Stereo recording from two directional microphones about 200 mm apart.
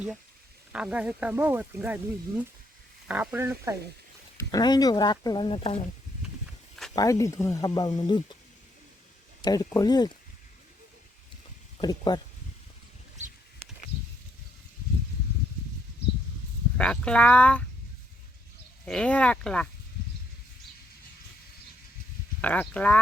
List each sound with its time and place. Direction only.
0.7 s speech: 5° right (ahead or behind)
3.1 s speech: 10° right (ahead or behind)
4.4 s speech: 20° left (ahead or behind)
6.9 s speech: 15° left (ahead or behind)
9.4 s speech: 20° left (ahead or behind)
11.8 s speech: 20° left (ahead or behind)
16.7 s speech: 5° left (ahead or behind)
18.9 s speech: 5° left (ahead or behind)
22.4 s speech: 5° left (ahead or behind)